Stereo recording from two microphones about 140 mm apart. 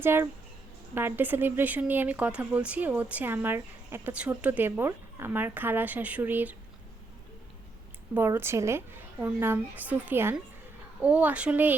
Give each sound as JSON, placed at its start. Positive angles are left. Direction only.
{"t": 0.0, "sound": "speech", "side_deg": -15}
{"t": 8.1, "sound": "a woman's voice", "side_deg": -15}